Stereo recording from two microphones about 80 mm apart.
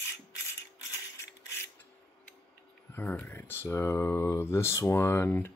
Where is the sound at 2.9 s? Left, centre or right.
Left.